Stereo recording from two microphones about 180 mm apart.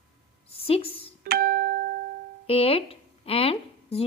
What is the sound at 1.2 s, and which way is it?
Music, 55° right (ahead or behind).